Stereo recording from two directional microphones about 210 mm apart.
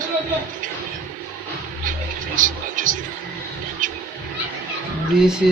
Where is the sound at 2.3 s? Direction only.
40° right (ahead or behind).